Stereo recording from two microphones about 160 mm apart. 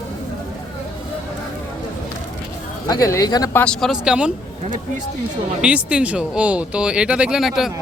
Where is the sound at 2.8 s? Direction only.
20° left (ahead or behind).